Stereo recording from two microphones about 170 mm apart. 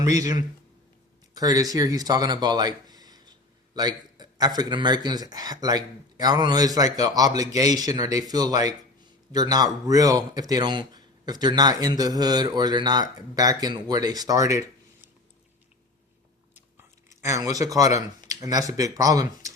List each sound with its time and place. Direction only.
0.0 s a man's voice: 20° right (ahead or behind)
17.2 s a man's voice: 20° right (ahead or behind)